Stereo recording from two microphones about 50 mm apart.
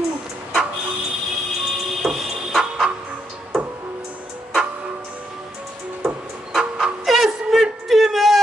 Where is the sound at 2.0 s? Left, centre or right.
Centre.